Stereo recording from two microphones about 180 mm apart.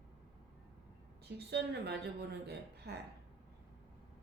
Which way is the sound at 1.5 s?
65° right (ahead or behind).